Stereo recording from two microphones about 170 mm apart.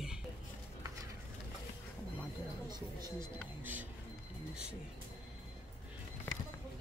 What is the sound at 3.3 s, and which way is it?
Speech, 10° right (ahead or behind).